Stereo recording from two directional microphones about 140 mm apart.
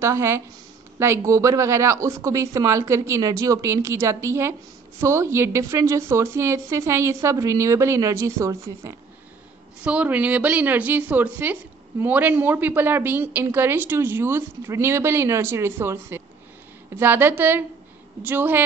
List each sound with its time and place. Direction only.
0.0 s a woman's voice: 20° right (ahead or behind)
9.8 s a woman's voice: 10° right (ahead or behind)